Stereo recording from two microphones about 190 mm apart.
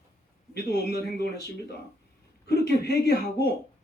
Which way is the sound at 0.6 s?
60° left (ahead or behind).